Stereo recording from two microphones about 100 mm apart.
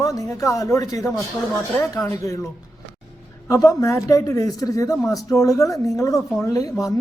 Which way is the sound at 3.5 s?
30° left (ahead or behind).